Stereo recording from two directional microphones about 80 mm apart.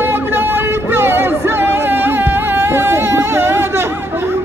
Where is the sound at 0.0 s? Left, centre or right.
Right.